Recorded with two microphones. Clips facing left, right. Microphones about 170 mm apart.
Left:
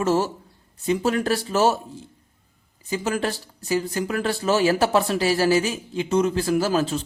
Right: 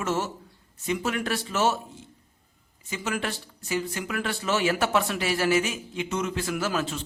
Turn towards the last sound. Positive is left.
turn(degrees=35)  # may be behind; listen again after turning